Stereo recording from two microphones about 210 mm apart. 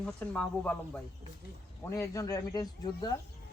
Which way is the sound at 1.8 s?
15° left (ahead or behind).